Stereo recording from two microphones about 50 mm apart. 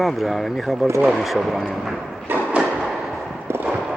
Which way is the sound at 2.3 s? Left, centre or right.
Right.